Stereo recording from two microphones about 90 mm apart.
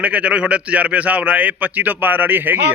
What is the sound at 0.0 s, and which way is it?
Speech, 15° right (ahead or behind).